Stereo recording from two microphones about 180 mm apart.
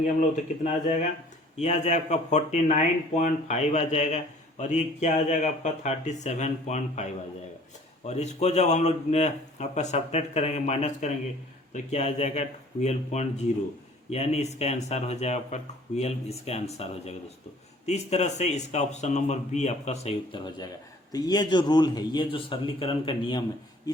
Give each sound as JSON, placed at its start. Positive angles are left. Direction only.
{"t": 0.2, "sound": "a man's voice", "side_deg": 40}